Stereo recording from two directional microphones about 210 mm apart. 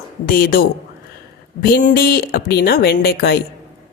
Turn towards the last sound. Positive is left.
turn(degrees=50)  # may be behind; listen again after turning